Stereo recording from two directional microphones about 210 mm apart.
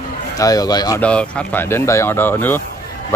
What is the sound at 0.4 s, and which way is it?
Speech, 15° left (ahead or behind).